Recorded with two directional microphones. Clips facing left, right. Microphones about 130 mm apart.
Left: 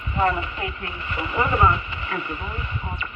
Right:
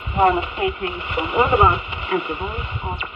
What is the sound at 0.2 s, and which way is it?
Speech, 20° right (ahead or behind).